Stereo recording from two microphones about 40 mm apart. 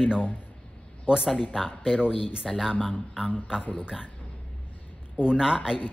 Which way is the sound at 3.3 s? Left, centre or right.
Centre.